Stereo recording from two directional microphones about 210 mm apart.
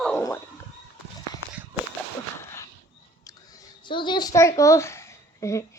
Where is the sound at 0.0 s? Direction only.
10° left (ahead or behind).